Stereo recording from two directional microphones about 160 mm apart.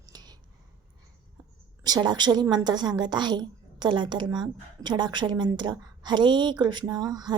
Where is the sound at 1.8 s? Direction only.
25° right (ahead or behind).